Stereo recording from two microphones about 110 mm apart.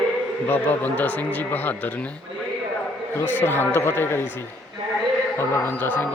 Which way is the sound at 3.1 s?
20° left (ahead or behind).